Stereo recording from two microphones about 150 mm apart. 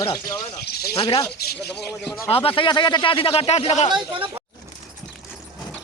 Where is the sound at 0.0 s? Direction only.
25° left (ahead or behind).